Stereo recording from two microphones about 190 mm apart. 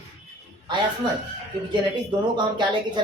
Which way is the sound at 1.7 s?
25° right (ahead or behind).